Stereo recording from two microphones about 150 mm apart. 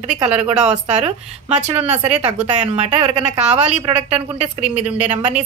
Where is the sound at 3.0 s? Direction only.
50° right (ahead or behind).